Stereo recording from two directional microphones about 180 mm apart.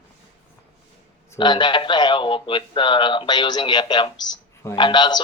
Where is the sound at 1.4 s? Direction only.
25° left (ahead or behind).